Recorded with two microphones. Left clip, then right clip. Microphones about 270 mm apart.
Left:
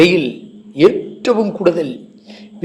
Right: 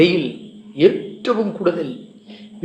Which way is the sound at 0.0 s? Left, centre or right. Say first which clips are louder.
Left 4 dB; left.